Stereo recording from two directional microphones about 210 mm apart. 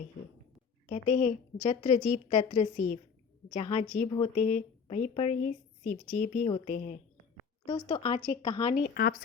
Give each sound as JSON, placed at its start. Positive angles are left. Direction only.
{"t": 0.9, "sound": "speech", "side_deg": 35}
{"t": 7.7, "sound": "speech", "side_deg": 25}